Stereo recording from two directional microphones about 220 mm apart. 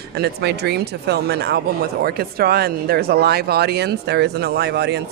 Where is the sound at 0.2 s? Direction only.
50° right (ahead or behind).